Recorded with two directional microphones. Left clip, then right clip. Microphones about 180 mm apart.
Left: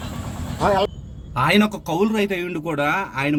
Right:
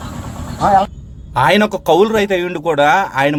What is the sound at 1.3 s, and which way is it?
A man's voice, 35° right (ahead or behind).